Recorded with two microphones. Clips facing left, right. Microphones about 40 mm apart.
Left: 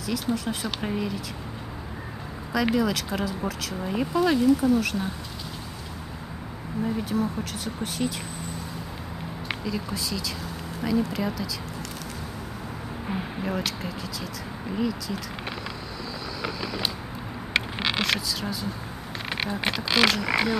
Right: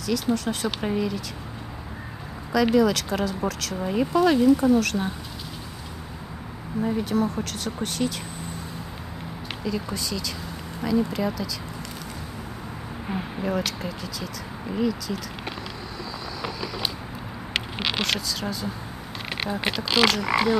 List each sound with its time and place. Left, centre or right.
0.0 s speech: centre
2.5 s speech: centre
6.7 s speech: centre
9.7 s speech: centre
13.1 s speech: centre
17.7 s speech: centre